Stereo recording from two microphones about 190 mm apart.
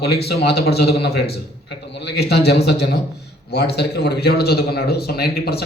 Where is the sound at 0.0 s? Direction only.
60° left (ahead or behind).